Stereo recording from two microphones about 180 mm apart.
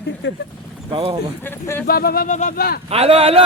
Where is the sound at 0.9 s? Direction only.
30° right (ahead or behind).